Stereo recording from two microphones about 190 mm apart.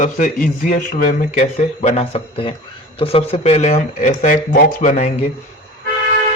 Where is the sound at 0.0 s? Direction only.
45° left (ahead or behind).